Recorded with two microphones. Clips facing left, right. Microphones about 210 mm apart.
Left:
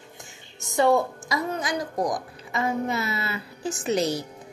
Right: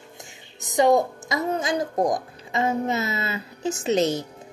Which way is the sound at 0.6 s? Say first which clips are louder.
Right 2 dB; 15° right (ahead or behind).